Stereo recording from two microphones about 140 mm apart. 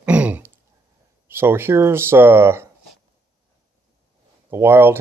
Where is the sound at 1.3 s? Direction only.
15° right (ahead or behind).